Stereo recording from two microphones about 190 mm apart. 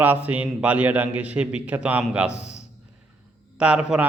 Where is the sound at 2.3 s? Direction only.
35° left (ahead or behind).